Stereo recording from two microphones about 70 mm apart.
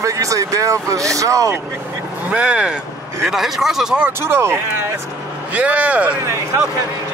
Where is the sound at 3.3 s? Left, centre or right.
Centre.